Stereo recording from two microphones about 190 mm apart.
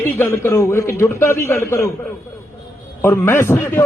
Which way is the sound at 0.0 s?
10° left (ahead or behind).